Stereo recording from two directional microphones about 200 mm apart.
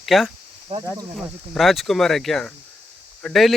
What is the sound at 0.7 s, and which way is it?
Speech, 35° right (ahead or behind).